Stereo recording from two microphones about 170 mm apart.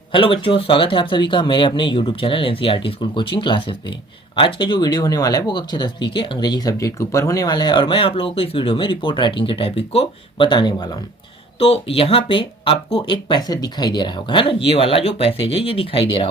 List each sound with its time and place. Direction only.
0.1 s speech: 30° left (ahead or behind)